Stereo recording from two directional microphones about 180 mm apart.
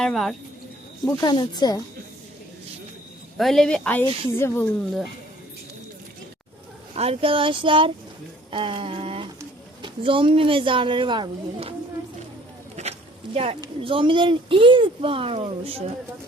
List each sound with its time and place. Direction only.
0.0 s speech: centre (ahead or behind)
1.2 s speech: 25° left (ahead or behind)
3.3 s speech: centre (ahead or behind)
6.9 s speech: 35° right (ahead or behind)
12.8 s a sound: 40° right (ahead or behind)
13.3 s speech: 35° right (ahead or behind)